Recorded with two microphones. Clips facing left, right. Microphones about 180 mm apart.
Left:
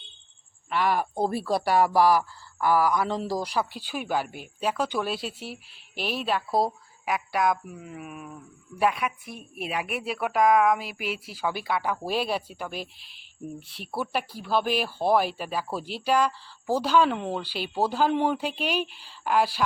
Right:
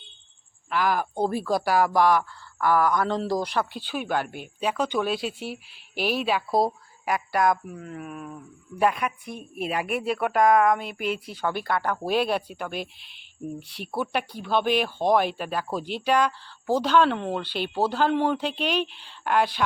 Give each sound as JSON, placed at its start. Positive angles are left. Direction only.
{"t": 0.7, "sound": "speech", "side_deg": 0}